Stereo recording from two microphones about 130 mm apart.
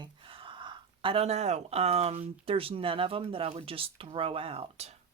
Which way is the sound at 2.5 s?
45° right (ahead or behind).